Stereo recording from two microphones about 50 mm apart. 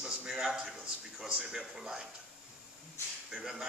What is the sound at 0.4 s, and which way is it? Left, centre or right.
A man's voice, centre.